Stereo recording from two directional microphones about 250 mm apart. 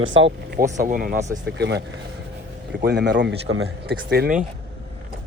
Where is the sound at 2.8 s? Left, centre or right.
Right.